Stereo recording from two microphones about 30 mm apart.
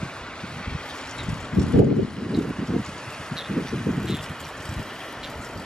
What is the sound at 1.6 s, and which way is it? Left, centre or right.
Vehicle, left.